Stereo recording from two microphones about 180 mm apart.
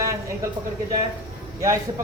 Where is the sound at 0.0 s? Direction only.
15° right (ahead or behind).